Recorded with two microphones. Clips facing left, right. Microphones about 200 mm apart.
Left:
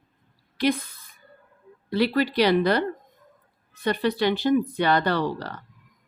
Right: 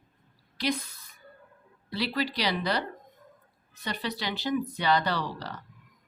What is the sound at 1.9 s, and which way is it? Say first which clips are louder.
Speech: left 8 dB; 55° left (ahead or behind).